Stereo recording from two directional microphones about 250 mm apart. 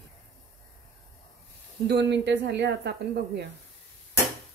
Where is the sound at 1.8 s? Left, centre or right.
Right.